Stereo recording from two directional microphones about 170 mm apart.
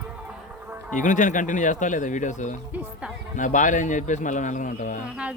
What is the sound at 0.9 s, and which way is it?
A man's voice, 50° left (ahead or behind).